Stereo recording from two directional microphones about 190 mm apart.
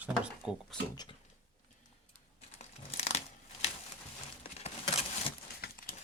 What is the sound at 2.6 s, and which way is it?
Crumpling, 35° left (ahead or behind).